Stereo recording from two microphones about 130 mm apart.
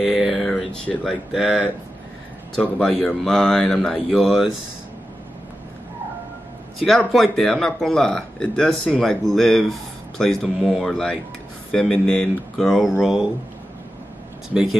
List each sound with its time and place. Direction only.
0.0 s a sound: centre (ahead or behind)
0.9 s speech: 15° left (ahead or behind)
1.3 s speech: 5° right (ahead or behind)
7.1 s speech: centre (ahead or behind)
14.5 s speech: 5° right (ahead or behind)